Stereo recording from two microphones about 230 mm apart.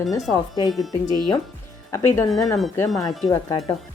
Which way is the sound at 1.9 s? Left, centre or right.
Centre.